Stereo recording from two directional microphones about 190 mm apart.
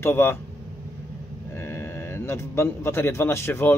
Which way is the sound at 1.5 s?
10° left (ahead or behind).